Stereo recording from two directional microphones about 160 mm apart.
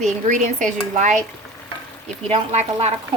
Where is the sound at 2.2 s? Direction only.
35° right (ahead or behind).